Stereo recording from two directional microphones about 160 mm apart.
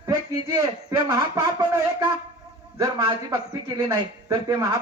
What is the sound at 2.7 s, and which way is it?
A man's voice, 25° right (ahead or behind).